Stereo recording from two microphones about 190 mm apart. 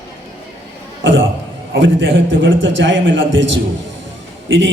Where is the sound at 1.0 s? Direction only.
85° right.